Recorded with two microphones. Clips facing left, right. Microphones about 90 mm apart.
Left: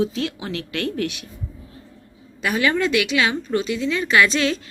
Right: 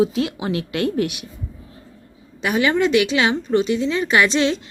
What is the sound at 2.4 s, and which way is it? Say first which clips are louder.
A woman's voice: right 2 dB; 20° right (ahead or behind).